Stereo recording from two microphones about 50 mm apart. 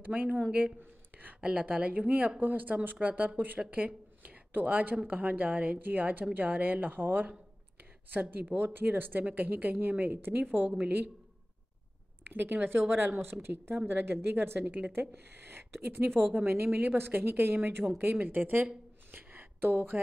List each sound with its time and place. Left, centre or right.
0.0 s a woman's voice: right
12.3 s a woman's voice: right
14.6 s a woman's voice: right
15.0 s speech: right
17.8 s a woman's voice: right
18.2 s a woman's voice: right
19.1 s a sound: right